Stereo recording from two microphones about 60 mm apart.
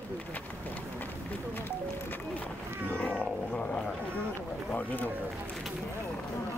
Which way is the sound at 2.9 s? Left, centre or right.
Centre.